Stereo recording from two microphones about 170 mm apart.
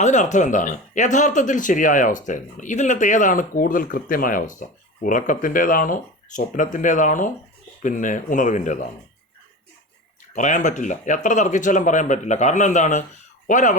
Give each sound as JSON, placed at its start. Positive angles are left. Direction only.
{"t": 0.0, "sound": "speech", "side_deg": 45}
{"t": 10.3, "sound": "speech", "side_deg": 45}